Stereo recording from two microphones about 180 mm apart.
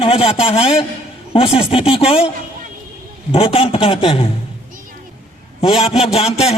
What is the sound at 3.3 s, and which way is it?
Speech, 30° left (ahead or behind).